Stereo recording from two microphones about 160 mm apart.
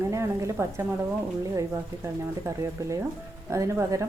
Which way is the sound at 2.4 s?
20° right (ahead or behind).